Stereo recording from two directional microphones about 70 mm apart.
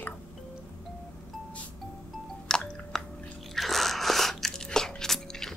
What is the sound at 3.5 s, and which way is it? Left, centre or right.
Biting, centre.